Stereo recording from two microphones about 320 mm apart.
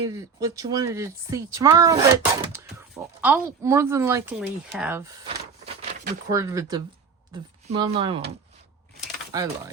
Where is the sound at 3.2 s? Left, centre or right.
Centre.